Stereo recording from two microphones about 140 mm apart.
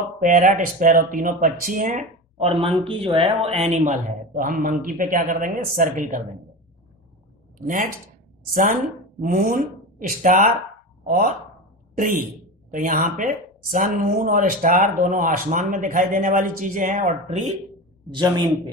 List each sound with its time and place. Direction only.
0.2 s speech: 70° right (ahead or behind)
2.6 s speech: 40° right (ahead or behind)
3.4 s speech: 50° right (ahead or behind); by 6.2 s 70° right (ahead or behind)
7.5 s speech: 75° right (ahead or behind)
9.2 s speech: 85° right; by 10.5 s 70° right (ahead or behind)
11.1 s speech: 90° right
12.7 s speech: 75° right (ahead or behind); by 17.6 s 60° right (ahead or behind)
18.1 s speech: 35° right (ahead or behind)